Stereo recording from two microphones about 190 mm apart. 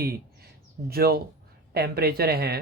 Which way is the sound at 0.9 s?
55° right (ahead or behind).